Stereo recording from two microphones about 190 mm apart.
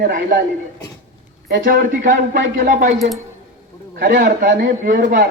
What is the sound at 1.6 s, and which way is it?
Speech, 50° right (ahead or behind).